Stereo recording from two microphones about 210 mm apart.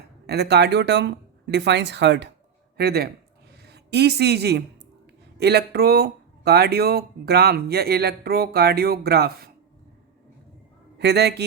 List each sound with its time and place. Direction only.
0.3 s speech: 50° right (ahead or behind)
10.9 s speech: 50° right (ahead or behind)